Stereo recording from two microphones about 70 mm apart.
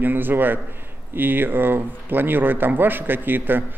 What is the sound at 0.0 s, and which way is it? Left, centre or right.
A man's voice, right.